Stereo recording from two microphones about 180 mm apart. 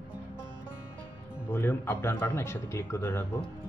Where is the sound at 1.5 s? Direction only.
10° left (ahead or behind).